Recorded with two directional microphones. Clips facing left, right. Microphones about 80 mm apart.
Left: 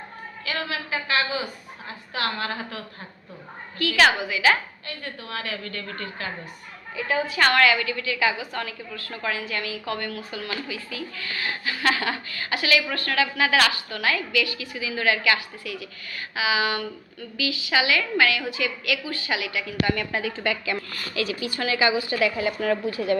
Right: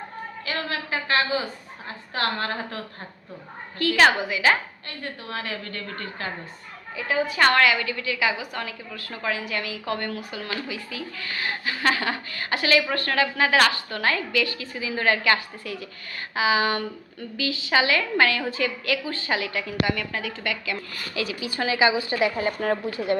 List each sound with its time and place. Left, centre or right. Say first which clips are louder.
0.4 s a woman's voice: even; right
20.1 s a woman's voice: left 3 dB; left
21.2 s a woman's voice: left 1 dB; right
22.4 s a woman's voice: even; right